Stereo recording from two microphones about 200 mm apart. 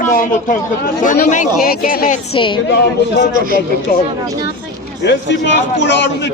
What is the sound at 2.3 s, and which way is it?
Speech, 25° left (ahead or behind).